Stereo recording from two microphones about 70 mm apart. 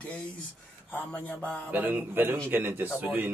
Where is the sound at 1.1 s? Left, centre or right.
Centre.